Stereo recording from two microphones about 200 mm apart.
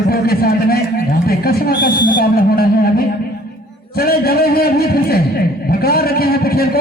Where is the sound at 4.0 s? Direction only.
50° left (ahead or behind).